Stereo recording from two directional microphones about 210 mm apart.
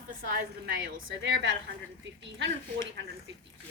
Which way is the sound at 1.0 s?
60° right (ahead or behind).